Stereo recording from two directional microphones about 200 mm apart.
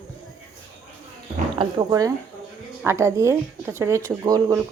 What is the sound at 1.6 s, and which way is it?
Speech, 20° right (ahead or behind).